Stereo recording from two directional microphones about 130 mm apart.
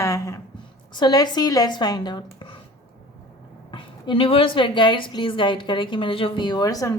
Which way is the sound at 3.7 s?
40° left (ahead or behind).